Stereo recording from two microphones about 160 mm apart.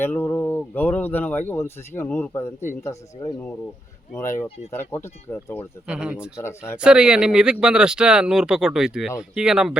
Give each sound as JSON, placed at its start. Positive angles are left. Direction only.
{"t": 0.0, "sound": "speech", "side_deg": 15}
{"t": 5.9, "sound": "speech", "side_deg": -5}
{"t": 6.3, "sound": "speech", "side_deg": 15}
{"t": 6.8, "sound": "speech", "side_deg": -5}